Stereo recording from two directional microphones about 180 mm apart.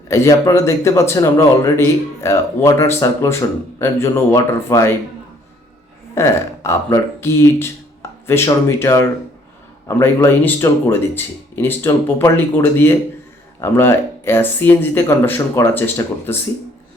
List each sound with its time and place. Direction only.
0.1 s a man's voice: 15° left (ahead or behind)
6.1 s a man's voice: 15° left (ahead or behind)